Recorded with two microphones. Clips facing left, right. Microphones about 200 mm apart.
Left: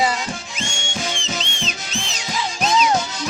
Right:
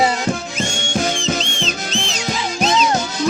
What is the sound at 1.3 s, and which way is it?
Music, 40° right (ahead or behind).